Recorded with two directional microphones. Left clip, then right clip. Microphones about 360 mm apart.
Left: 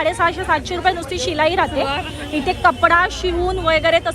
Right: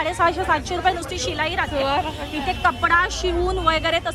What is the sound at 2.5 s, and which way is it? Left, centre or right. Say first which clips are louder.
Speech: left 5 dB; centre.